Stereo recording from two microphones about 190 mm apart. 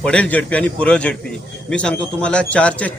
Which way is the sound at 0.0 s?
5° left (ahead or behind).